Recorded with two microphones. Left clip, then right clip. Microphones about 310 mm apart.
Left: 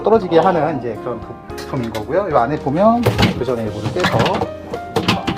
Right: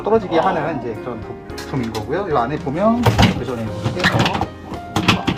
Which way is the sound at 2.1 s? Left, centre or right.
Centre.